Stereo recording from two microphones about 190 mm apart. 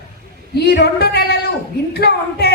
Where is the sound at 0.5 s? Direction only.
60° left (ahead or behind).